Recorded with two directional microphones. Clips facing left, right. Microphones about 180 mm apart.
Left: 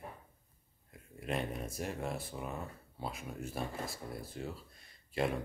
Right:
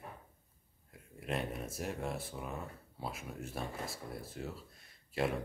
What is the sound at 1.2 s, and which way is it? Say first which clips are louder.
Speech: left 1 dB; centre (ahead or behind).